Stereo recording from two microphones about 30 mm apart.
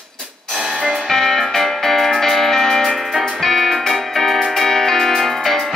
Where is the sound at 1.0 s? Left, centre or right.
Centre.